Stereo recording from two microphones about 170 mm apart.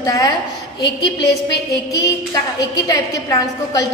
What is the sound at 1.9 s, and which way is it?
A woman's voice, 20° left (ahead or behind).